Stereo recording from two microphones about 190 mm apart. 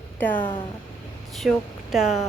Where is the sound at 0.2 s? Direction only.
10° left (ahead or behind).